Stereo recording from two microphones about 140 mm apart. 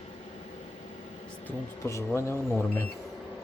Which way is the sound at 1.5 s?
20° left (ahead or behind).